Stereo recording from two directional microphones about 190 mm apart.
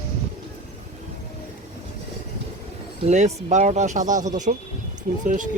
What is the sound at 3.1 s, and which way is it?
Speech, 35° right (ahead or behind).